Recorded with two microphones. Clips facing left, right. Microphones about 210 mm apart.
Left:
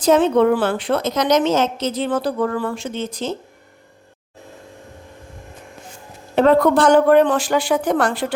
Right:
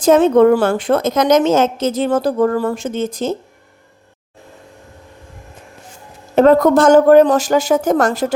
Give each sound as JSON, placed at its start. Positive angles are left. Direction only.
{"t": 0.0, "sound": "a woman's voice", "side_deg": -50}
{"t": 6.3, "sound": "a woman's voice", "side_deg": -45}